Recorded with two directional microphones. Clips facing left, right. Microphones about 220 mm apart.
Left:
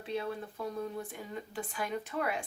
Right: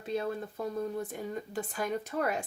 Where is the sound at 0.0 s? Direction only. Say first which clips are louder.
Right 3 dB; 45° right (ahead or behind).